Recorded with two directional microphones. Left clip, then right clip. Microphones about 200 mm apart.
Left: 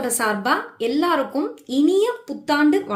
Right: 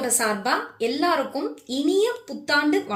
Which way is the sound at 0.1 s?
45° left (ahead or behind).